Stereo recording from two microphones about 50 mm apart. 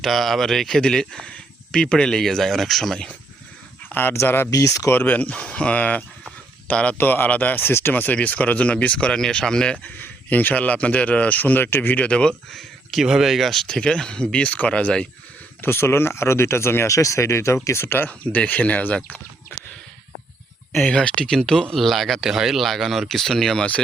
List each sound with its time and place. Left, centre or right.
0.0 s speech: centre
3.8 s speech: left
7.0 s speech: left
7.6 s speech: left
7.9 s speech: left
9.1 s speech: centre
9.8 s speech: left
12.5 s speech: centre
13.7 s speech: centre
15.6 s speech: left
17.8 s speech: left
18.1 s speech: left
20.9 s speech: centre
21.8 s speech: centre